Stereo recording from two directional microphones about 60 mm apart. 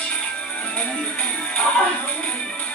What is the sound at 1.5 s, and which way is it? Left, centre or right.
Music, centre.